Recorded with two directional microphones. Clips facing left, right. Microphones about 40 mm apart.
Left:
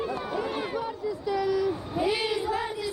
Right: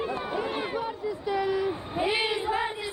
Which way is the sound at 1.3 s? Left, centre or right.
Right.